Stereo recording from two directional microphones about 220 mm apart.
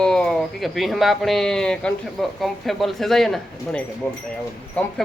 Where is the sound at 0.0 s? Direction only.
5° left (ahead or behind).